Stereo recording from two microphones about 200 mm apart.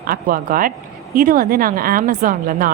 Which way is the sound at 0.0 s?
45° right (ahead or behind).